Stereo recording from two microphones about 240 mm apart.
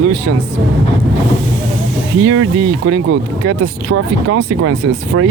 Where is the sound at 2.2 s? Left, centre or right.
Right.